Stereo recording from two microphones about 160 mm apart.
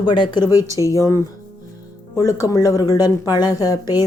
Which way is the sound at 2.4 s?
25° left (ahead or behind).